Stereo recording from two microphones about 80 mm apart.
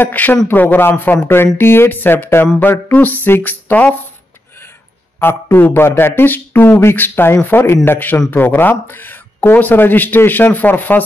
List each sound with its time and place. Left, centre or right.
0.0 s speech: left
5.2 s speech: left